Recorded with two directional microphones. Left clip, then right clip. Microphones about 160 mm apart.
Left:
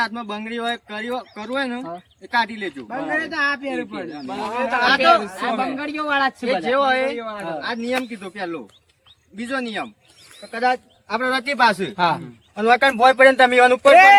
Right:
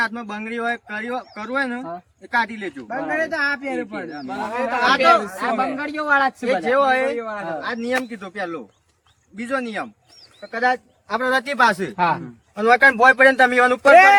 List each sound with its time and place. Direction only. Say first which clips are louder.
0.0 s speech: even; 10° right (ahead or behind)
5.7 s speech: right 3 dB; centre (ahead or behind)
6.7 s speech: right 1 dB; 10° right (ahead or behind)
7.2 s speech: right 1 dB; 5° left (ahead or behind)
7.6 s speech: even; 10° right (ahead or behind)
11.9 s a man's voice: even; 35° left (ahead or behind)
12.5 s speech: right 2 dB; centre (ahead or behind)
13.9 s speech: even; 5° right (ahead or behind)